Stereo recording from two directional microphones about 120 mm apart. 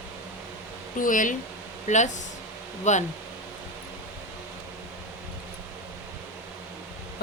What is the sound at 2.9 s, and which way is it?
Speech, 75° left (ahead or behind).